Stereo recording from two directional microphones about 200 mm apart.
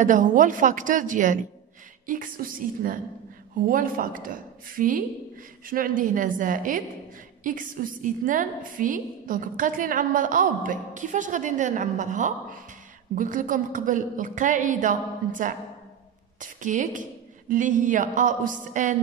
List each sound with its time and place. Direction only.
0.0 s a woman's voice: 40° right (ahead or behind)